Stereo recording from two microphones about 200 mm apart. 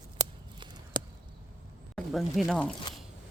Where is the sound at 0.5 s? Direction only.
20° right (ahead or behind).